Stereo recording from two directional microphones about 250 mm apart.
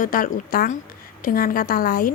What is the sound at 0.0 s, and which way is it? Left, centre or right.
A woman's voice, left.